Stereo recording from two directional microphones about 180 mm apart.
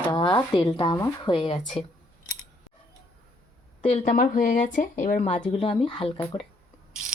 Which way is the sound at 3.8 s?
35° left (ahead or behind).